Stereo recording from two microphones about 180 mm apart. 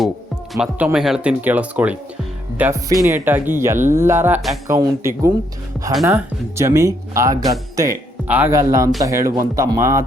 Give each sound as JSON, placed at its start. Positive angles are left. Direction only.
{"t": 0.5, "sound": "speech", "side_deg": -5}